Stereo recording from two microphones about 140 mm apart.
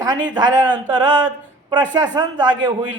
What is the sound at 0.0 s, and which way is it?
A man's voice, 30° right (ahead or behind).